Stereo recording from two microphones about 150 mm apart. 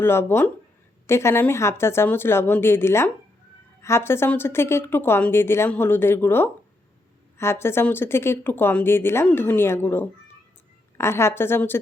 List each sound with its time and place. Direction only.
0.0 s speech: 15° left (ahead or behind)